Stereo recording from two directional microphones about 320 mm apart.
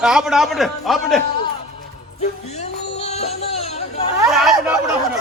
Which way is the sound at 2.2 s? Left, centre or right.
Centre.